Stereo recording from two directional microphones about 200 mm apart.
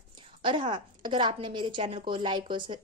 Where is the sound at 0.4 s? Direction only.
25° right (ahead or behind).